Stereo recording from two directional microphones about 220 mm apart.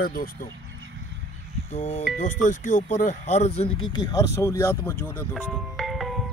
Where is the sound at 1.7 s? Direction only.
30° left (ahead or behind).